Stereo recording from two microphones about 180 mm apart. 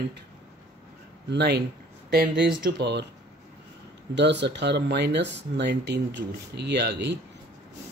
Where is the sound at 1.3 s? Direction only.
70° right (ahead or behind).